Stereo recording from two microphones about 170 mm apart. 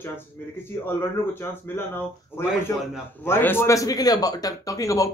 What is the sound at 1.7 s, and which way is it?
A man's voice, 15° left (ahead or behind).